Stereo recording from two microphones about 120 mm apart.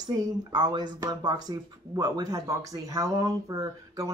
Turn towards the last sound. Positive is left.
turn(degrees=-30)  # may be behind; listen again after turning